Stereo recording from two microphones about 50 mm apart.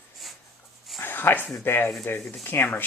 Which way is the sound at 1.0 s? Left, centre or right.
Left.